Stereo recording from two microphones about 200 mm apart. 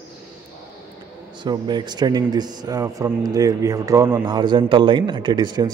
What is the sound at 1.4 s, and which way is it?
Speech, 20° right (ahead or behind).